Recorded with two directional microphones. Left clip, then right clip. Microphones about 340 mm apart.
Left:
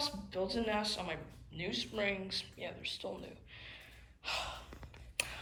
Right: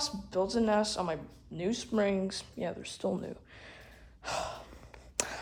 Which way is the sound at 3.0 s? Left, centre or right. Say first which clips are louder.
Right 9 dB; right.